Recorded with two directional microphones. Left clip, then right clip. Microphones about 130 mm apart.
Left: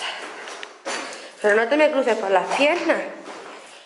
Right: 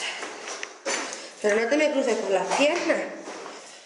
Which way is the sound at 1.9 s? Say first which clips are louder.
Left 5 dB; 20° left (ahead or behind).